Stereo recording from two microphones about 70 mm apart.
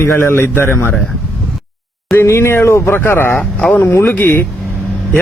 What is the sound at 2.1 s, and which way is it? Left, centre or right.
Speech, left.